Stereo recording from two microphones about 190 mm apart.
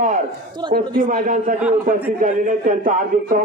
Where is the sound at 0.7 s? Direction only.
45° right (ahead or behind).